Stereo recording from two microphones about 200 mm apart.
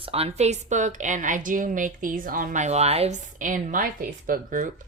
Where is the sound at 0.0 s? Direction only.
30° right (ahead or behind).